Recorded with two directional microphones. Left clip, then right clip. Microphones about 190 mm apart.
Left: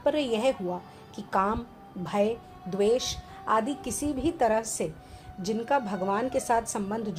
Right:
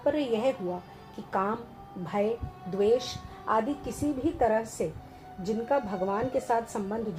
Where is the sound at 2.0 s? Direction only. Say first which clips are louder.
Left 2 dB; 30° left (ahead or behind).